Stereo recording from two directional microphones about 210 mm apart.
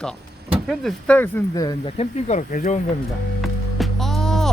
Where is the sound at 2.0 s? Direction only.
35° left (ahead or behind).